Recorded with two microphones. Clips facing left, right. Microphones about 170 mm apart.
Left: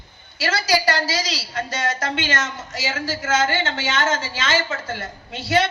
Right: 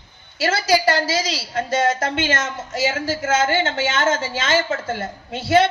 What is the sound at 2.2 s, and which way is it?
Speech, 25° right (ahead or behind).